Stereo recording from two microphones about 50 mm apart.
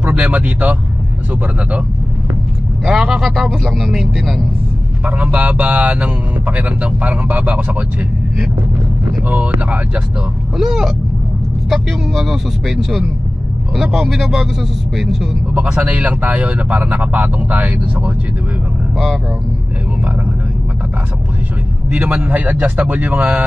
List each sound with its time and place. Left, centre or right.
0.0 s speech: right
2.8 s speech: centre
5.0 s speech: right
10.6 s speech: centre
15.5 s speech: right
22.2 s a man's voice: right